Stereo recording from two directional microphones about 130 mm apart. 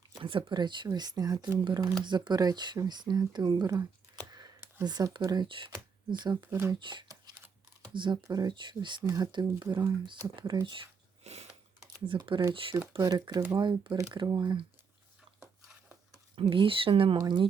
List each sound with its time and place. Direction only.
0.1 s speech: 40° right (ahead or behind)
6.5 s speech: 20° right (ahead or behind)
6.7 s a sound: 35° right (ahead or behind)
7.9 s speech: 35° right (ahead or behind)
9.0 s speech: 20° right (ahead or behind)
9.2 s speech: 30° right (ahead or behind)
10.1 s speech: 35° right (ahead or behind)
11.2 s a sound: 55° right (ahead or behind)
12.0 s speech: 40° right (ahead or behind)
16.3 s speech: 40° right (ahead or behind)